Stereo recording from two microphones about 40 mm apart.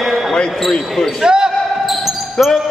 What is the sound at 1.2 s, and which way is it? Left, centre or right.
Basketball bounce, centre.